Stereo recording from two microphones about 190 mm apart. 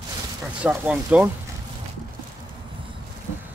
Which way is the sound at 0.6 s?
5° right (ahead or behind).